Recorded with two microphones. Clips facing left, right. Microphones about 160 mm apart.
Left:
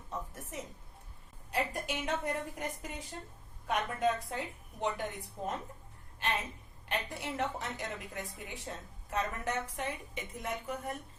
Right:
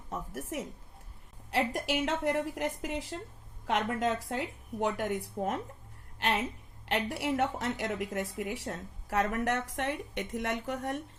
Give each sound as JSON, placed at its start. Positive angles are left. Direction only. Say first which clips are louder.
{"t": 0.1, "sound": "a woman's voice", "louder": "right 5 dB", "side_deg": -90}